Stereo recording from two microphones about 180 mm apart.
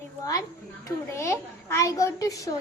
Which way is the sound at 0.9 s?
15° left (ahead or behind).